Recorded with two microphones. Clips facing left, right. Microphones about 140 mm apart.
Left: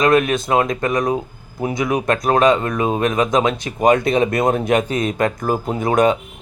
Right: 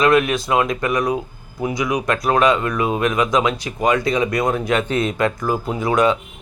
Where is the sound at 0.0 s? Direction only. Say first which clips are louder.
Left 1 dB; 45° left (ahead or behind).